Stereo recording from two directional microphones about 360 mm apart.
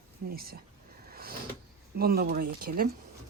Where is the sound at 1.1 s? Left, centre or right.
Right.